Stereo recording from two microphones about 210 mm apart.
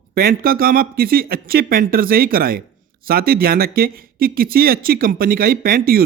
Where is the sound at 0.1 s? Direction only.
45° right (ahead or behind).